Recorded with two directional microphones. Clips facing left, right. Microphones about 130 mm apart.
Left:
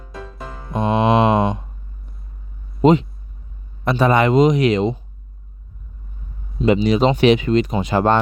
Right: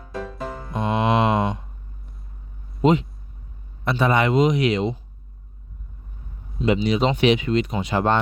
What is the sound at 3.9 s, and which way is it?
Speech, 45° left (ahead or behind).